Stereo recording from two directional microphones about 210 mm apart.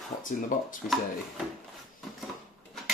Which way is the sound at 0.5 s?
40° left (ahead or behind).